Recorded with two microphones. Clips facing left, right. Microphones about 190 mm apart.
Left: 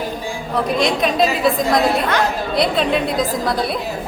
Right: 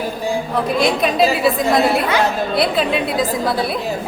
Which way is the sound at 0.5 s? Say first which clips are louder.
Left 1 dB; centre (ahead or behind).